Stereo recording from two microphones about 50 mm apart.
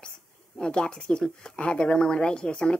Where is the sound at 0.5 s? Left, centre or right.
Centre.